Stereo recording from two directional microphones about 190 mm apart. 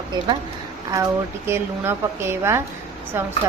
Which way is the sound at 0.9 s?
15° right (ahead or behind).